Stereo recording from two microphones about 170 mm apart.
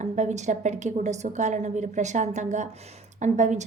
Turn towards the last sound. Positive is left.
turn(degrees=-45)  # may be behind; listen again after turning